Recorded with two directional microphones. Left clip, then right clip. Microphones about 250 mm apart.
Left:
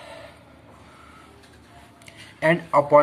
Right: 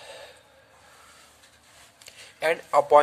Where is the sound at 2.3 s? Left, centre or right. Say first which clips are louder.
Left 3 dB; right.